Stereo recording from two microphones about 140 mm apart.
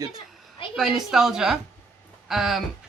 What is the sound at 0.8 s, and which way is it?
Speech, centre (ahead or behind).